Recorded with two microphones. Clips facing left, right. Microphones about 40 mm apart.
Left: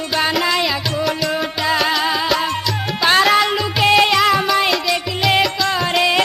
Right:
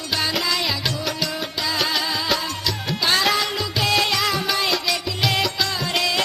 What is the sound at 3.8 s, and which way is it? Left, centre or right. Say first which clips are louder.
Music: left 8 dB; left.